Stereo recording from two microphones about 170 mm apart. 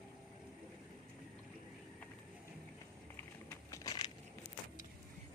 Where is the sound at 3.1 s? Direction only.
15° left (ahead or behind).